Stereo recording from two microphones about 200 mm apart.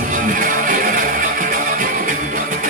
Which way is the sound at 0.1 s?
40° right (ahead or behind).